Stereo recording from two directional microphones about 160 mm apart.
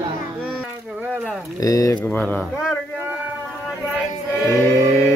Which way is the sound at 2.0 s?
10° left (ahead or behind).